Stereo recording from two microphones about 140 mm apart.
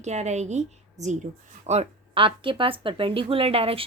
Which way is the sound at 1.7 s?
45° right (ahead or behind).